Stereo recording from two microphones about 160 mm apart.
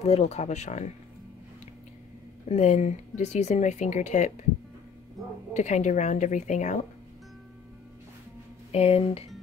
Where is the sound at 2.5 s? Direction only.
45° left (ahead or behind).